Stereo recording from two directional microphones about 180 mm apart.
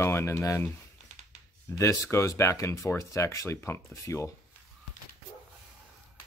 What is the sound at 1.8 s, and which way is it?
Speech, 15° left (ahead or behind).